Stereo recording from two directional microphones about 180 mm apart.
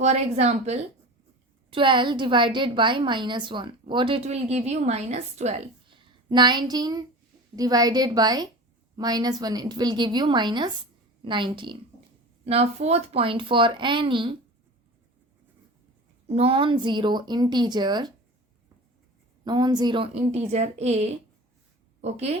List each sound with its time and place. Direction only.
0.0 s speech: 40° right (ahead or behind)
1.7 s a woman's voice: 25° right (ahead or behind)
16.2 s a woman's voice: 35° right (ahead or behind)
19.5 s a woman's voice: 25° right (ahead or behind)
20.1 s speech: 40° right (ahead or behind)